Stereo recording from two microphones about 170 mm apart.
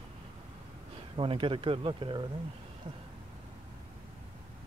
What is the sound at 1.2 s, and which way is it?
Speech, 30° right (ahead or behind).